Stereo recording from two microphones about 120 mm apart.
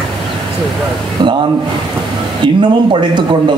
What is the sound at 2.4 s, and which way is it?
Speech, 40° right (ahead or behind).